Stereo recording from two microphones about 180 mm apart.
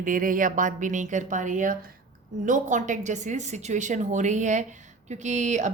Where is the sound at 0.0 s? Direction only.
50° right (ahead or behind).